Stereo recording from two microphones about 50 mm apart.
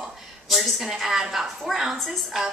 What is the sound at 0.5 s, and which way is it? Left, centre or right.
A woman's voice, centre.